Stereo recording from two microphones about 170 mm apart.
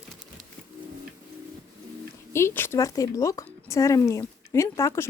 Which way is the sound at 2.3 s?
15° left (ahead or behind).